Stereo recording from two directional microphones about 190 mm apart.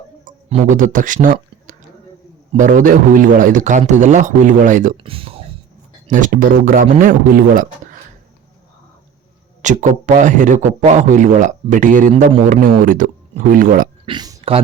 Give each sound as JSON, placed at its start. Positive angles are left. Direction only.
{"t": 0.3, "sound": "a man's voice", "side_deg": -40}
{"t": 5.0, "sound": "speech", "side_deg": -30}
{"t": 6.1, "sound": "speech", "side_deg": -45}
{"t": 9.6, "sound": "a man's voice", "side_deg": -40}
{"t": 14.0, "sound": "a sound", "side_deg": -25}